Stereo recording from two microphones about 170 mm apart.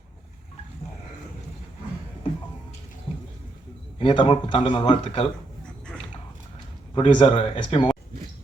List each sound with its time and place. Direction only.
3.9 s a man's voice: 30° left (ahead or behind)
6.9 s speech: 30° left (ahead or behind)